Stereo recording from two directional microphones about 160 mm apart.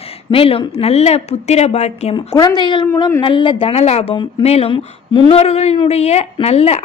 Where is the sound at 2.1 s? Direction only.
25° left (ahead or behind).